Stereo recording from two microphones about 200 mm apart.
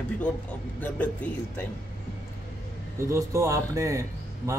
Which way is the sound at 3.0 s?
15° right (ahead or behind).